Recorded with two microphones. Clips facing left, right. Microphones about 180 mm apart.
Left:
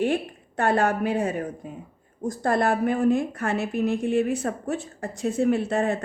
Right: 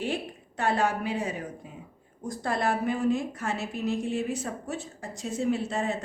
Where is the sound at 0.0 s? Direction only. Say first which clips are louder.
Left 7 dB; 55° left (ahead or behind).